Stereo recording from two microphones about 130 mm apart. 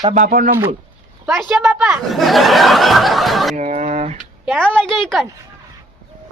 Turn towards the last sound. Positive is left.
turn(degrees=5)  # may be behind; listen again after turning